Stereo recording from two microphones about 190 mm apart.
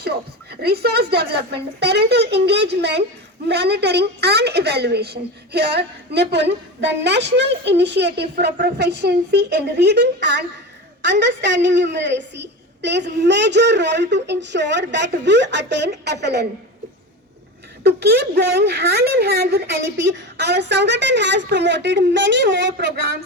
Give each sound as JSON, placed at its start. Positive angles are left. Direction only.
{"t": 0.6, "sound": "a woman's voice", "side_deg": -55}
{"t": 17.8, "sound": "a woman's voice", "side_deg": -60}